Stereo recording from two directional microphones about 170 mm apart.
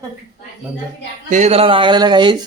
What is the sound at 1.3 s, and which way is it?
Speech, 40° right (ahead or behind).